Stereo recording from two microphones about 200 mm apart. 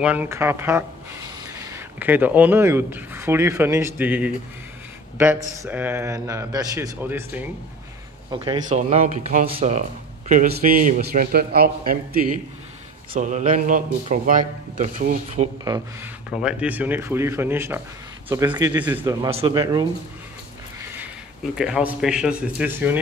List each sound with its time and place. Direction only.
0.0 s speech: 10° right (ahead or behind)
8.3 s speech: 25° right (ahead or behind)
8.6 s a man's voice: 35° right (ahead or behind)
15.6 s speech: 20° right (ahead or behind)
16.3 s speech: 5° right (ahead or behind)
19.0 s speech: 25° right (ahead or behind)
21.5 s a man's voice: 5° right (ahead or behind)